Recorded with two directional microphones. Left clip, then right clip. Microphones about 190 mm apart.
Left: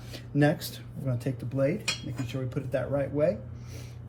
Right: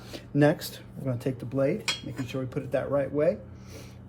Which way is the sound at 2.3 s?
30° right (ahead or behind).